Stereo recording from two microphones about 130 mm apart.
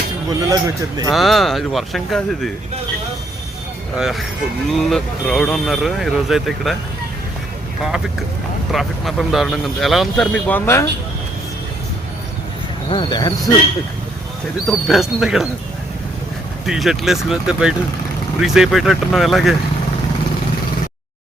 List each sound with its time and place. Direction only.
0.3 s a man's voice: 30° right (ahead or behind)
1.1 s speech: centre (ahead or behind)
3.9 s speech: centre (ahead or behind)
7.8 s speech: 5° right (ahead or behind)
12.9 s speech: 35° left (ahead or behind)
14.7 s speech: centre (ahead or behind)
16.6 s speech: 5° right (ahead or behind)